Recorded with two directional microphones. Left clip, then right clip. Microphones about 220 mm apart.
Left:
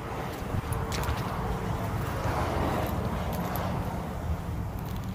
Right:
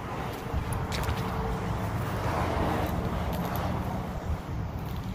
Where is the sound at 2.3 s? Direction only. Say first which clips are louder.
Right 1 dB; 60° left (ahead or behind).